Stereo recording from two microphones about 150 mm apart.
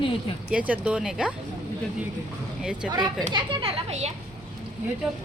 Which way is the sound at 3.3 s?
30° right (ahead or behind).